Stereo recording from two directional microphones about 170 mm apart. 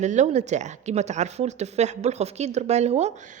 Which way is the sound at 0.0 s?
45° right (ahead or behind).